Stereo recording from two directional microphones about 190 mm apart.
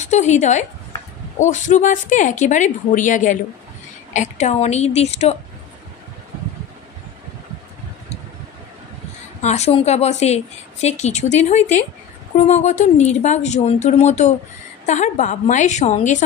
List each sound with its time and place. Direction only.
0.0 s a woman's voice: 40° left (ahead or behind)
9.4 s a woman's voice: 35° left (ahead or behind)